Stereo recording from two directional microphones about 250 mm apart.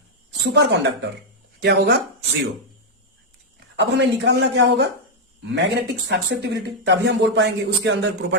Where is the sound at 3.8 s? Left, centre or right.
Right.